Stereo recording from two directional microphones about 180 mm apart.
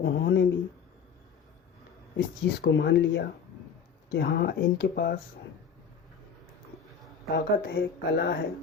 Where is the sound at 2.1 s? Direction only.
75° left (ahead or behind); by 5.2 s 60° left (ahead or behind).